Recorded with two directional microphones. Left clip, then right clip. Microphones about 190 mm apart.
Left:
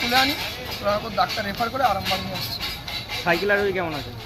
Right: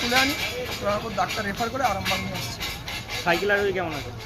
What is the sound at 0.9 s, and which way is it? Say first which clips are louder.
Speech: left 4 dB; 5° right (ahead or behind).